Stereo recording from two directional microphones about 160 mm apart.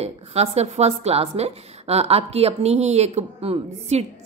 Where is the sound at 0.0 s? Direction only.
40° right (ahead or behind).